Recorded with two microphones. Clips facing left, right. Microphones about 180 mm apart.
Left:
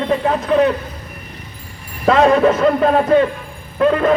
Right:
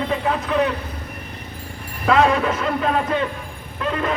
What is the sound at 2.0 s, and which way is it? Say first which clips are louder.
A man's voice: left 5 dB; 40° left (ahead or behind).